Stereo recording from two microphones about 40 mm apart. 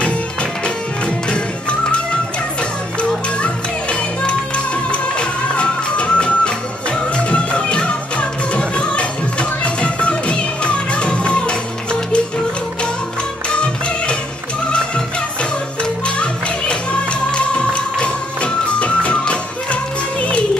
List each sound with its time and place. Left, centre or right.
1.0 s music: left
3.4 s music: left
13.5 s music: left
15.8 s music: left